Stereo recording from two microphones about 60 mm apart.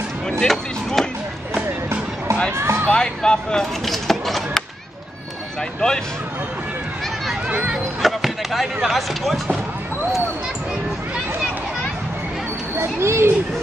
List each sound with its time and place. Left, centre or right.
0.4 s chop: centre
2.5 s a sound: right
3.0 s speech: centre
7.4 s speech: centre
8.0 s basketball bounce: centre
8.8 s speech: centre
12.7 s speech: right